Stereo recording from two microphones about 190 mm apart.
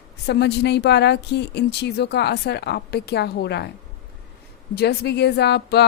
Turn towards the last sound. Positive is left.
turn(degrees=60)  # may be behind; listen again after turning